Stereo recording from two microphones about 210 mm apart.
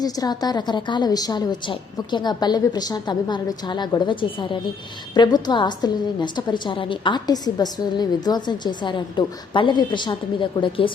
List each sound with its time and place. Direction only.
0.0 s a woman's voice: 20° left (ahead or behind)